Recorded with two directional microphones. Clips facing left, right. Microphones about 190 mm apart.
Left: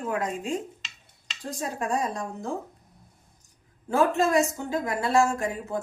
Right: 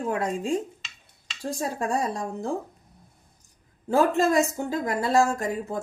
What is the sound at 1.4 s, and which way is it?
Speech, 35° right (ahead or behind).